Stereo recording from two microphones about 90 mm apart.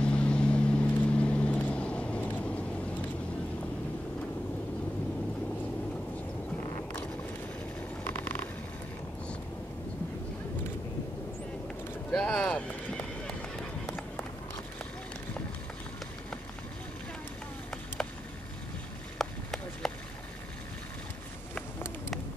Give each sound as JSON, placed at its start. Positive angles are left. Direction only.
{"t": 0.0, "sound": "vehicle", "side_deg": 10}
{"t": 8.0, "sound": "mechanisms", "side_deg": 20}
{"t": 12.1, "sound": "vehicle", "side_deg": 5}
{"t": 12.4, "sound": "clip-clop", "side_deg": 15}
{"t": 13.8, "sound": "run", "side_deg": 20}
{"t": 19.1, "sound": "a sound", "side_deg": 5}